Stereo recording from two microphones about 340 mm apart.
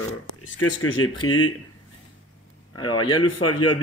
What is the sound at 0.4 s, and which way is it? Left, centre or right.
Speech, left.